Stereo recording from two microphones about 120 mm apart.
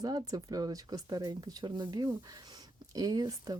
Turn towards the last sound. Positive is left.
turn(degrees=-30)  # may be behind; listen again after turning